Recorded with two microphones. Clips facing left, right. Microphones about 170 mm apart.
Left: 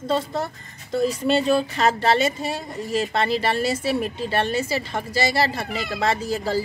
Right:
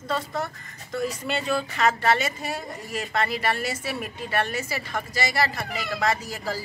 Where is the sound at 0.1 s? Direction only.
30° left (ahead or behind).